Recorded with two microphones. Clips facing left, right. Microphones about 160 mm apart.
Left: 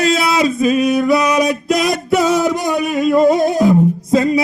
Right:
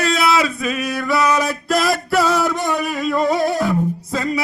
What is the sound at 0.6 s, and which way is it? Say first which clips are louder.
Male singing: left 9 dB; 25° left (ahead or behind).